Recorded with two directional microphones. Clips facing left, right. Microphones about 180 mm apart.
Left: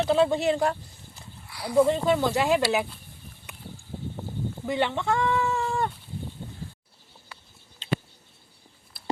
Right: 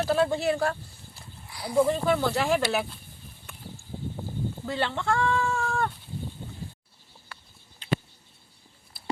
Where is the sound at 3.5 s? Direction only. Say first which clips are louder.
Left 1 dB; 15° left (ahead or behind).